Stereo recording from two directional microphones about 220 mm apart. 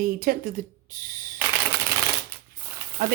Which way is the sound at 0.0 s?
40° right (ahead or behind).